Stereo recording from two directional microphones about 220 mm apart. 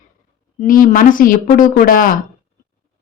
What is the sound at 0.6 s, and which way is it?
A woman's voice, 40° left (ahead or behind).